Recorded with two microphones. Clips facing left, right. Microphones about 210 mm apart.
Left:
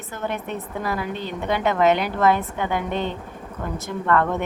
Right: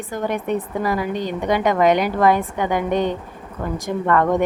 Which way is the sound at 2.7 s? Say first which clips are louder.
Right 6 dB; 45° right (ahead or behind).